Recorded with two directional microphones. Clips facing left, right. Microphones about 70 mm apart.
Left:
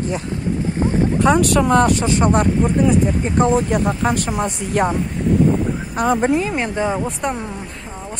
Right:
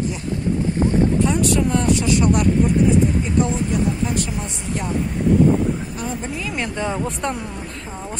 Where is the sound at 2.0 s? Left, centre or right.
Left.